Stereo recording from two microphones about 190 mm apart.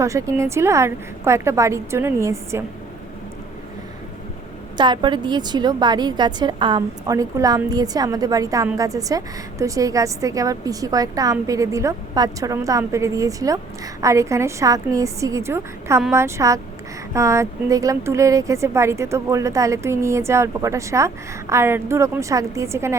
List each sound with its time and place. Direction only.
0.0 s speech: 15° right (ahead or behind)
4.8 s a woman's voice: 25° right (ahead or behind)